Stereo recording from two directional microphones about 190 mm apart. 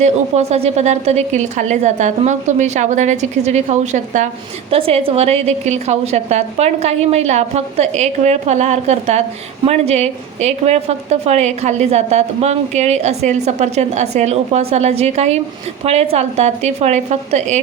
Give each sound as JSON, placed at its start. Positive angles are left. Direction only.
{"t": 0.0, "sound": "a woman's voice", "side_deg": -35}